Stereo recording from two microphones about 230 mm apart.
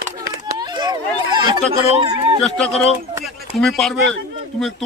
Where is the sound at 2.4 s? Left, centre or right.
Centre.